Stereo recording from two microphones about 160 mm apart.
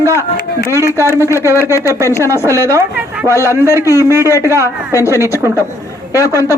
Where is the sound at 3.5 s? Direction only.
15° right (ahead or behind).